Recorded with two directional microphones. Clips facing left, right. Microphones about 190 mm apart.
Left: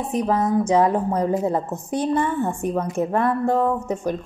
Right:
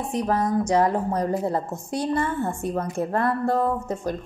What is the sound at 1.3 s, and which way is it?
A woman's voice, 20° left (ahead or behind).